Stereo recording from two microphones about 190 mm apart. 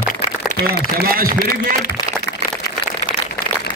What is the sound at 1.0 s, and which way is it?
Speech, 50° right (ahead or behind).